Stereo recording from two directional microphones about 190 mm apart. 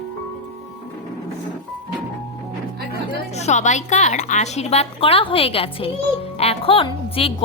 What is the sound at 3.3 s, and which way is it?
A woman's voice, 35° left (ahead or behind).